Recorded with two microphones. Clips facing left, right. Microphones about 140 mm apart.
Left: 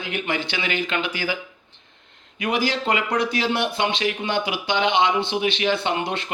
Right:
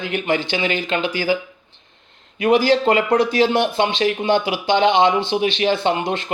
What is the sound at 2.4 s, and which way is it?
Speech, 35° right (ahead or behind).